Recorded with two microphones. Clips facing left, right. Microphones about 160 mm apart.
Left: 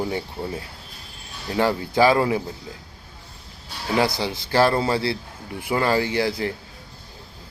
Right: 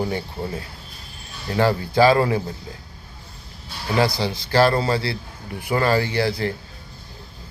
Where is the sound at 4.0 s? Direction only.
20° left (ahead or behind).